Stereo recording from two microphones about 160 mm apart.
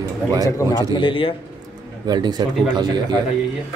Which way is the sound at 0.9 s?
35° left (ahead or behind).